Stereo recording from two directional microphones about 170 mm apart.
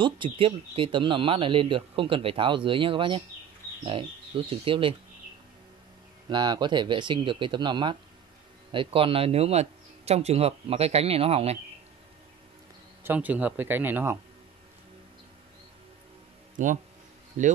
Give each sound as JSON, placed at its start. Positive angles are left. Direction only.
{"t": 0.0, "sound": "speech", "side_deg": -30}
{"t": 6.2, "sound": "speech", "side_deg": -25}
{"t": 13.0, "sound": "speech", "side_deg": -10}
{"t": 16.6, "sound": "speech", "side_deg": -50}